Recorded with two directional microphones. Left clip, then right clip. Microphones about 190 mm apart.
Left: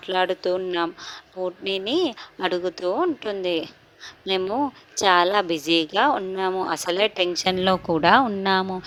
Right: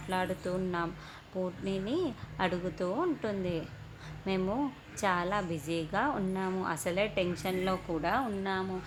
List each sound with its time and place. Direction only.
0.1 s a woman's voice: 45° left (ahead or behind)